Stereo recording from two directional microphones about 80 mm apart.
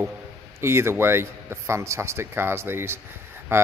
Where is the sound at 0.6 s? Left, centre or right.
Right.